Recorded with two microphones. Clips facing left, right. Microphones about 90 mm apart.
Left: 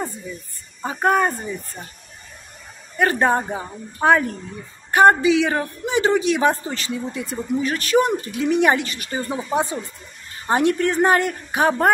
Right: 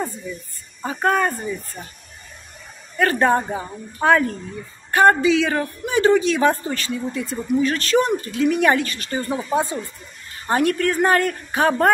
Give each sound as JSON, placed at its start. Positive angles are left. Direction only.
{"t": 0.8, "sound": "speech", "side_deg": 15}
{"t": 3.0, "sound": "speech", "side_deg": 20}